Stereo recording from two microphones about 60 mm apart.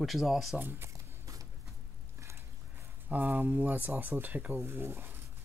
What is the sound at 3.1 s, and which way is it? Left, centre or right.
Speech, right.